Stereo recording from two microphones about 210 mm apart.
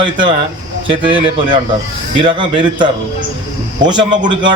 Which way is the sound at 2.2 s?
25° right (ahead or behind).